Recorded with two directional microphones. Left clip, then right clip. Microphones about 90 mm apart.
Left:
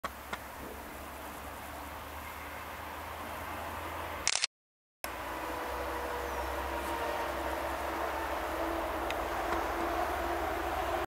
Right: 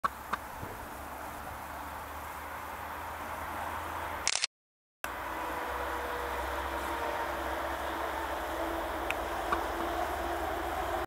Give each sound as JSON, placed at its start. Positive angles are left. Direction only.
{"t": 4.2, "sound": "a sound", "side_deg": 0}
{"t": 6.9, "sound": "vehicle", "side_deg": -10}
{"t": 10.7, "sound": "vehicle", "side_deg": 0}